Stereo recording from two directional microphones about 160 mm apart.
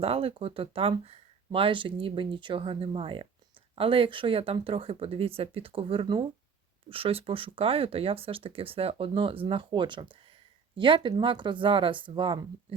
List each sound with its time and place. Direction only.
0.0 s speech: 35° right (ahead or behind)